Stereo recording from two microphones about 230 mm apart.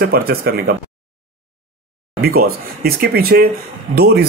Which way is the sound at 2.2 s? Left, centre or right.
Right.